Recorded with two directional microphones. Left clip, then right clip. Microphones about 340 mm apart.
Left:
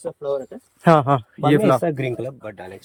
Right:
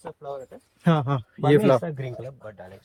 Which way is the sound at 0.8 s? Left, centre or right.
Centre.